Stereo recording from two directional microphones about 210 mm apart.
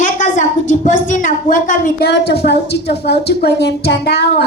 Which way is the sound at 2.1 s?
50° left (ahead or behind).